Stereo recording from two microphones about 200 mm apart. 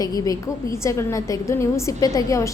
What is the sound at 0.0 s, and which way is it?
A woman's voice, 20° left (ahead or behind).